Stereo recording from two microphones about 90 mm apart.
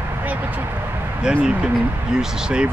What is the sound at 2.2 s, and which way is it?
Speech, 10° right (ahead or behind).